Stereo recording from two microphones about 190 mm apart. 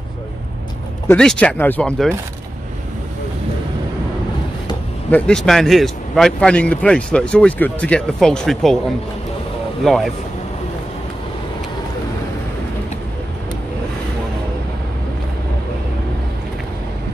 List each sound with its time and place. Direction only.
1.0 s speech: 5° left (ahead or behind)
5.1 s speech: 5° left (ahead or behind)
9.8 s speech: centre (ahead or behind)